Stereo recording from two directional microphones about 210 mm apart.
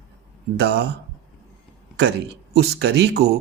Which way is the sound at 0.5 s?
55° right (ahead or behind).